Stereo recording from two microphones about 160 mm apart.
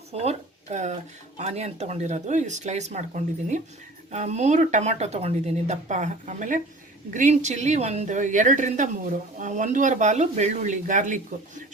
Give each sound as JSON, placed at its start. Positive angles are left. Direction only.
{"t": 0.1, "sound": "a woman's voice", "side_deg": -40}